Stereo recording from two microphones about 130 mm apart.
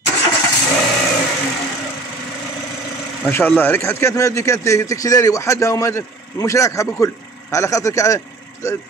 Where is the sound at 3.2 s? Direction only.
15° left (ahead or behind).